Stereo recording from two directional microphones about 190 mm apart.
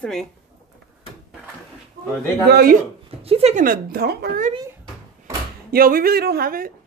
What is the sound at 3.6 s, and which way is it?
Speech, 50° right (ahead or behind).